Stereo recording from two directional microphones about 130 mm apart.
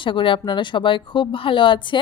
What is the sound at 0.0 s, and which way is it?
A woman's voice, 40° left (ahead or behind).